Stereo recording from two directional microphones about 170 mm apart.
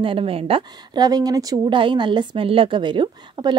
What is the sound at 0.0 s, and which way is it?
Speech, 30° right (ahead or behind).